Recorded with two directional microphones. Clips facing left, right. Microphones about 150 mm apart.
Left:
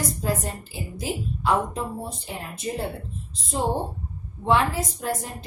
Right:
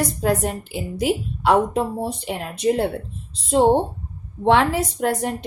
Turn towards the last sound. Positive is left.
turn(degrees=-80)